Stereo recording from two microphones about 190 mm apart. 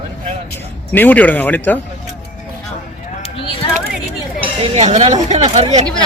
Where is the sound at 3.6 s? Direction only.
25° left (ahead or behind).